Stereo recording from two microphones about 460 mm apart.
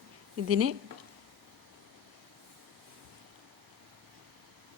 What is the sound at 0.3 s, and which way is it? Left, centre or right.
Speech, right.